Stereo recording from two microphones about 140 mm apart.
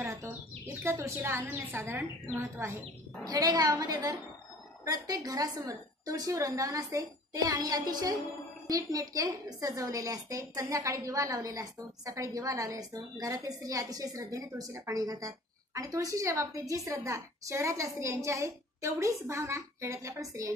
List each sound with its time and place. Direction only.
0.0 s bird: 20° right (ahead or behind)
0.8 s a woman's voice: 20° right (ahead or behind)